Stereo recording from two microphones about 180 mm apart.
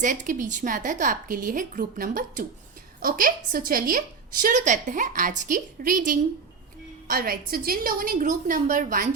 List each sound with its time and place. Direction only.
0.0 s a woman's voice: 45° right (ahead or behind)